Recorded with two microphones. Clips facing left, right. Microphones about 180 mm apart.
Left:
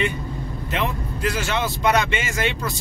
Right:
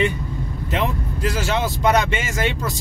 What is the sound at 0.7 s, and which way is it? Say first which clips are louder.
Speech: right 2 dB; 35° right (ahead or behind).